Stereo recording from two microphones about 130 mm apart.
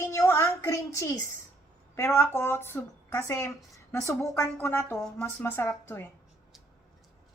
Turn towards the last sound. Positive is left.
turn(degrees=15)  # may be behind; listen again after turning